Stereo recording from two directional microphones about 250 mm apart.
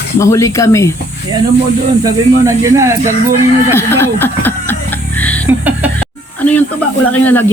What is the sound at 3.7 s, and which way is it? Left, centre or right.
Speech, centre.